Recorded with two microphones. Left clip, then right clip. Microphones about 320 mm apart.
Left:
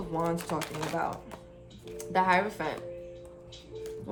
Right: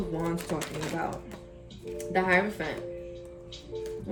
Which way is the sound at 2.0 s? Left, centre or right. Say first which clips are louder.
Even; centre.